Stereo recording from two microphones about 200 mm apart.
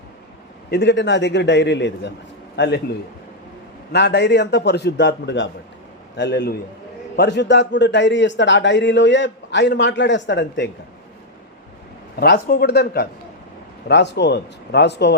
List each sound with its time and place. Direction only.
0.7 s a man's voice: 60° left (ahead or behind)
3.9 s a man's voice: 60° left (ahead or behind)
12.2 s a man's voice: 50° left (ahead or behind)